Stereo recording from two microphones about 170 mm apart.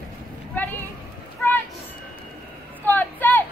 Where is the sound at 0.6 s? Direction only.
10° left (ahead or behind).